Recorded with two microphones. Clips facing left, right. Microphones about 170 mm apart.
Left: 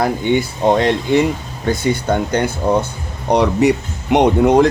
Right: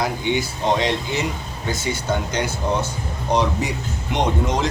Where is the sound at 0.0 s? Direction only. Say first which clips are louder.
Left 6 dB; 55° left (ahead or behind).